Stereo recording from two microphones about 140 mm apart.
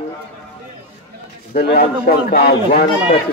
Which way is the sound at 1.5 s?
90° left.